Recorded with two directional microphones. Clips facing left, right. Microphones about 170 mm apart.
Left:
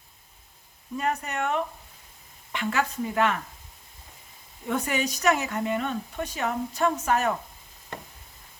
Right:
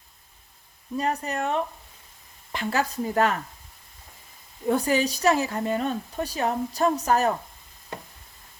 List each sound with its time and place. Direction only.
0.9 s a woman's voice: 35° right (ahead or behind)
4.7 s a woman's voice: 35° right (ahead or behind)